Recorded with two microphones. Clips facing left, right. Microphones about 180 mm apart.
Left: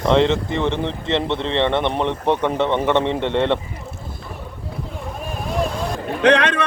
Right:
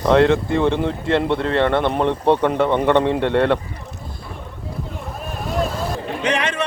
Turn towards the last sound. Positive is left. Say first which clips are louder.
# left 6 dB
turn(degrees=60)  # may be behind; listen again after turning